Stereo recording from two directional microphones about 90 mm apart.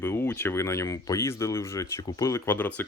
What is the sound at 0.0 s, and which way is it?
Speech, 25° left (ahead or behind).